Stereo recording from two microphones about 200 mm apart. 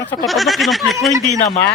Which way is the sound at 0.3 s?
Centre (ahead or behind).